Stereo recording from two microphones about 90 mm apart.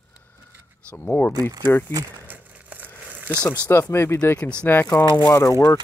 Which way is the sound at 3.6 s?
25° left (ahead or behind).